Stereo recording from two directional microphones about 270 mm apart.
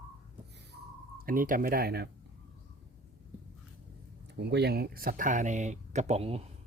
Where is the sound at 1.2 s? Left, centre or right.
Right.